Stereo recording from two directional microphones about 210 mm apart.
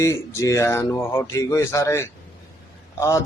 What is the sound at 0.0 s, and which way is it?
Speech, 15° left (ahead or behind).